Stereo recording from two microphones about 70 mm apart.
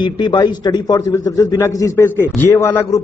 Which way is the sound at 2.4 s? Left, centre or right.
Left.